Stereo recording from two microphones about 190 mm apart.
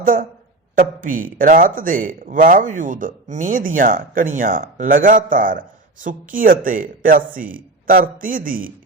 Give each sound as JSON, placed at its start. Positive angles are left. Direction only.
{"t": 0.0, "sound": "a woman's voice", "side_deg": -45}